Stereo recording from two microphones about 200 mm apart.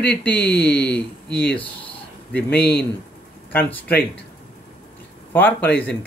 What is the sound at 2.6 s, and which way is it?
Speech, 55° left (ahead or behind).